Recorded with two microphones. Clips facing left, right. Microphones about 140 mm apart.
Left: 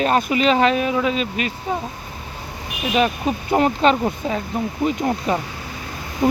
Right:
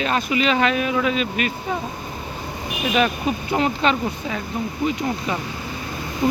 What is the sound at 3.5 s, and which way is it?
Speech, 40° left (ahead or behind).